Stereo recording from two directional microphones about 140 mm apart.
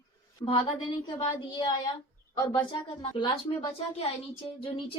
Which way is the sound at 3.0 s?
35° left (ahead or behind).